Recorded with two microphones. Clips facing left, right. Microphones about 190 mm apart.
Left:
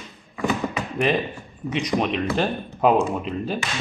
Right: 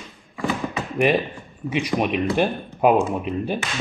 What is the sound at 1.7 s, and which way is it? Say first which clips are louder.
Speech: right 1 dB; 10° right (ahead or behind).